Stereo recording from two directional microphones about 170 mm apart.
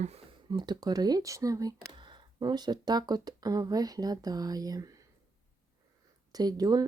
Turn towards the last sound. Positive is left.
turn(degrees=-20)  # may be behind; listen again after turning